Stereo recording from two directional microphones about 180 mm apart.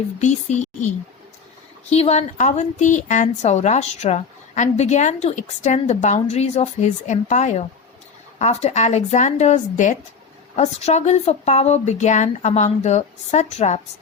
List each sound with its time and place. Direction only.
0.2 s a woman's voice: 40° left (ahead or behind)
1.9 s a woman's voice: 35° left (ahead or behind)